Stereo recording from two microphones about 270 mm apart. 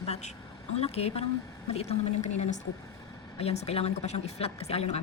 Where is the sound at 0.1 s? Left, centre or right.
Left.